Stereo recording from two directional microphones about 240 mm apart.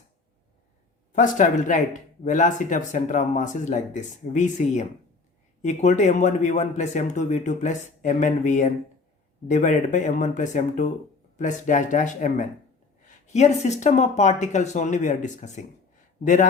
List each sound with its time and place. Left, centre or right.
1.1 s a man's voice: left